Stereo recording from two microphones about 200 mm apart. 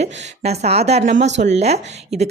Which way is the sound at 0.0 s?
35° right (ahead or behind).